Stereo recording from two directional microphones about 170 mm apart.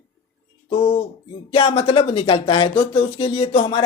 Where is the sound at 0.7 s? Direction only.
35° left (ahead or behind).